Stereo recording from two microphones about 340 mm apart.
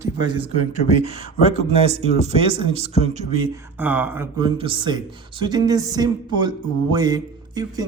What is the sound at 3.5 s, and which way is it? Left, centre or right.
Speech, centre.